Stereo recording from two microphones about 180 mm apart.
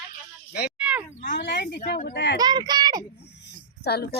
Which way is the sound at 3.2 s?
65° left (ahead or behind).